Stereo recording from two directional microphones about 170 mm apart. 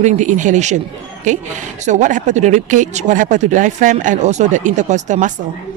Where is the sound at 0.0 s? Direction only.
45° right (ahead or behind).